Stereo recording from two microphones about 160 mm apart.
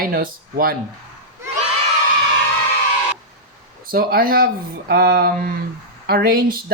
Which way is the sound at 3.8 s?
65° right (ahead or behind).